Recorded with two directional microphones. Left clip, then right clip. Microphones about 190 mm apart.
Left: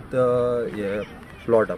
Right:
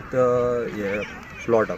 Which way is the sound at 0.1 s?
20° left (ahead or behind).